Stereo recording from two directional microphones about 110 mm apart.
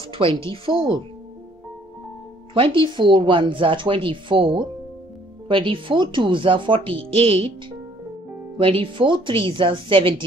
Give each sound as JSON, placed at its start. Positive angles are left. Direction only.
{"t": 0.1, "sound": "speech", "side_deg": -55}
{"t": 2.5, "sound": "speech", "side_deg": -50}
{"t": 8.5, "sound": "speech", "side_deg": -55}